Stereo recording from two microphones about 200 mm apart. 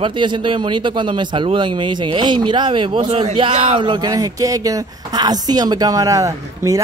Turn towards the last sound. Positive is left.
turn(degrees=-15)  # may be behind; listen again after turning